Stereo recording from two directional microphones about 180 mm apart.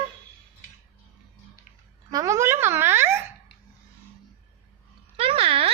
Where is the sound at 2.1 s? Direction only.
20° right (ahead or behind).